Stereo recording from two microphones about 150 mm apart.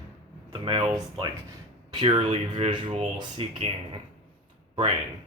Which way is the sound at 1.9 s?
35° right (ahead or behind).